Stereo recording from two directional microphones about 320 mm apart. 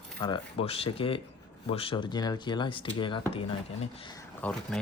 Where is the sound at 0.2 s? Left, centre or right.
Centre.